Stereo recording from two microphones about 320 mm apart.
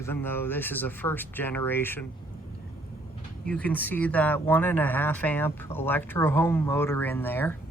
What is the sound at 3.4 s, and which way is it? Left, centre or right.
Speech, centre.